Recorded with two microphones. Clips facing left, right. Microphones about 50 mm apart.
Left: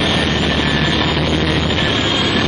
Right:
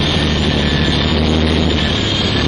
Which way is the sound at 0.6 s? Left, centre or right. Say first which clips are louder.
Even; left.